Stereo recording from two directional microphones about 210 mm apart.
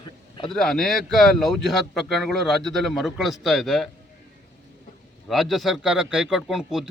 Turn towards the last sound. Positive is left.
turn(degrees=0)  # may be behind; listen again after turning